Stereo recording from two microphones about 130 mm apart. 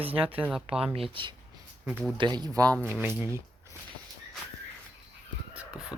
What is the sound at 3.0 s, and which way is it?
Speech, 15° right (ahead or behind).